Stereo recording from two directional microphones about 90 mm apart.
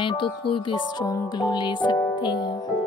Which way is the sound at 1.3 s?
50° left (ahead or behind).